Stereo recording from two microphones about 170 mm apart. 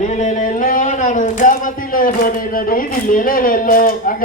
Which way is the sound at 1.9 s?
55° left (ahead or behind).